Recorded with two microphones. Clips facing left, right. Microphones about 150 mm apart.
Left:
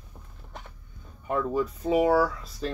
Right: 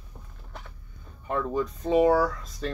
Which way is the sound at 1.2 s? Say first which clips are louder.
Left 1 dB; 10° left (ahead or behind).